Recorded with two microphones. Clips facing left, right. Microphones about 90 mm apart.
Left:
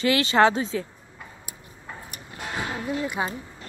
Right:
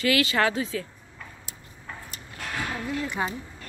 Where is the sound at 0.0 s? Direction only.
30° left (ahead or behind).